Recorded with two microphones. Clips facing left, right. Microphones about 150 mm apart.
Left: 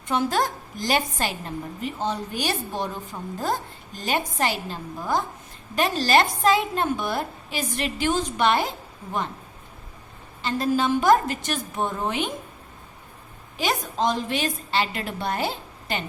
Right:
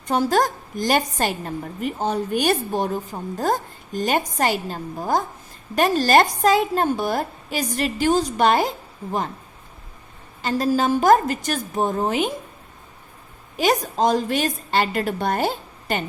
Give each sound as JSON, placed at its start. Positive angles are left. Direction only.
{"t": 0.1, "sound": "a woman's voice", "side_deg": -40}
{"t": 10.4, "sound": "a woman's voice", "side_deg": -40}
{"t": 13.6, "sound": "a woman's voice", "side_deg": -45}